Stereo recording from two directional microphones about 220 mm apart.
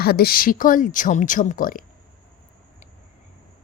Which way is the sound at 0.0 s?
45° left (ahead or behind).